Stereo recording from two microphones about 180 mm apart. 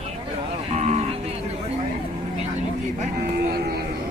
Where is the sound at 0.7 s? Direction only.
40° right (ahead or behind).